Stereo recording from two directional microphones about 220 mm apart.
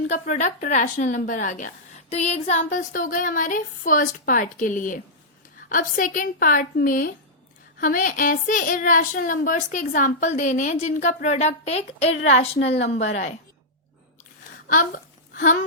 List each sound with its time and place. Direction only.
0.1 s a woman's voice: 35° left (ahead or behind)
12.5 s a woman's voice: 55° left (ahead or behind)
12.9 s a woman's voice: 30° left (ahead or behind)
15.3 s a sound: 35° left (ahead or behind)